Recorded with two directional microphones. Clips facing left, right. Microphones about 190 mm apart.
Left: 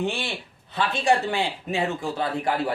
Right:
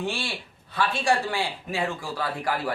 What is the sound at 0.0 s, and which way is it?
Speech, 20° left (ahead or behind).